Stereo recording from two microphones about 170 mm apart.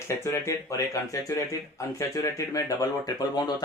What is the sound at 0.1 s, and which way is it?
Speech, 15° left (ahead or behind).